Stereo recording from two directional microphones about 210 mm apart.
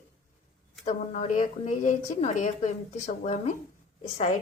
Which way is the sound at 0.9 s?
35° left (ahead or behind).